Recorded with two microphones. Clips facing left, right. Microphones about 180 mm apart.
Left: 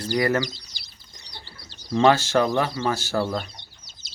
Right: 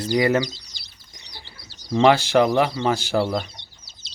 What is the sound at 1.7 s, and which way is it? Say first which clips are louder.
Speech: right 2 dB; 15° right (ahead or behind).